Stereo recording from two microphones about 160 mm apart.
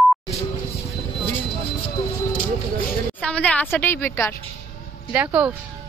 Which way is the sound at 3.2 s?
5° left (ahead or behind).